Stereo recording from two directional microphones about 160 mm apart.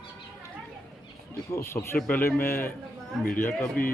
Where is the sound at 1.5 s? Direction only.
15° left (ahead or behind).